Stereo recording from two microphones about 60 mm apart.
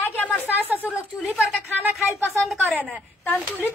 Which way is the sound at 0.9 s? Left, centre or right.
Right.